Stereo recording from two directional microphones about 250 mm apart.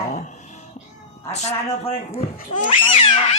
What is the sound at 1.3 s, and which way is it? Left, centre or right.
Speech, left.